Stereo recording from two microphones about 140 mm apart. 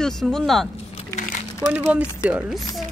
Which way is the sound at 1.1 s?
60° left (ahead or behind).